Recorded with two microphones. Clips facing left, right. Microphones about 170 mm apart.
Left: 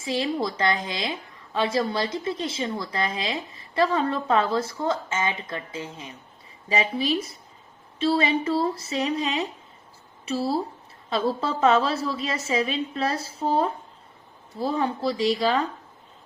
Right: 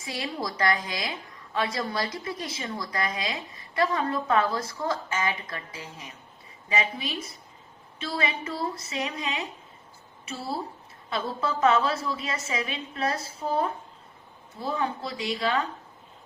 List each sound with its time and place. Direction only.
0.0 s a woman's voice: 25° left (ahead or behind)